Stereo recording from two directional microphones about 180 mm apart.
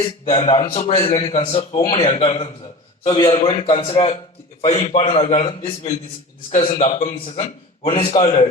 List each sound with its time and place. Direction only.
0.3 s a man's voice: 30° left (ahead or behind)